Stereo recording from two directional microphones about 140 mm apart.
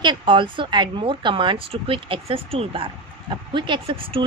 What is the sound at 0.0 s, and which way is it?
Speech, 35° right (ahead or behind).